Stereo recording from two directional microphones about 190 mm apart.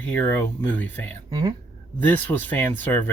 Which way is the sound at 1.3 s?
20° right (ahead or behind).